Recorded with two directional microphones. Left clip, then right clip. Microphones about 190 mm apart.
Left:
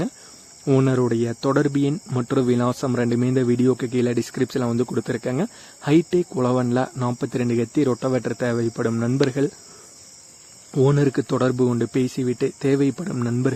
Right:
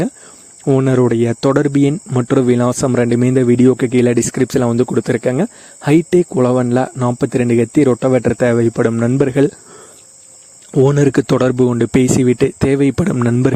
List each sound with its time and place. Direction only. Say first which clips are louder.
0.6 s speech: right 7 dB; 30° right (ahead or behind)
10.8 s speech: right 7 dB; 40° right (ahead or behind)